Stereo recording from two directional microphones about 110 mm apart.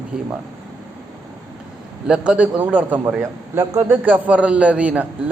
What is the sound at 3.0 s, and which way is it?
Speech, 25° right (ahead or behind).